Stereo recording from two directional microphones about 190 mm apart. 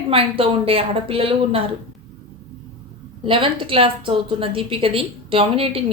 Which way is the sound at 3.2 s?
25° right (ahead or behind).